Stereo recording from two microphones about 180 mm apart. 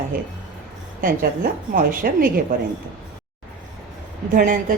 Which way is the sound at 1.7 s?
50° right (ahead or behind).